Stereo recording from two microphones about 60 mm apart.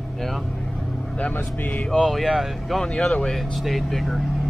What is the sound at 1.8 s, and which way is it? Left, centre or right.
Speech, centre.